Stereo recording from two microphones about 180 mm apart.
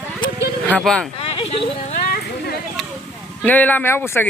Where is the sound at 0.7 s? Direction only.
5° left (ahead or behind).